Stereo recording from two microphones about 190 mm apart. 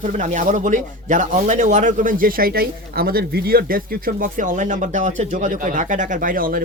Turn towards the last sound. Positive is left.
turn(degrees=-50)  # may be behind; listen again after turning